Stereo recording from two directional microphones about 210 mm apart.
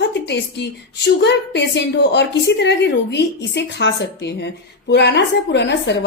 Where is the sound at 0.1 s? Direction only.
55° left (ahead or behind).